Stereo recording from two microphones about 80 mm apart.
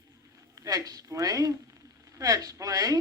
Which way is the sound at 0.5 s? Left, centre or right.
Right.